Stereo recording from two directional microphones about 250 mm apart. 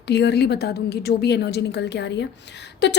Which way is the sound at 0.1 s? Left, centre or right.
Left.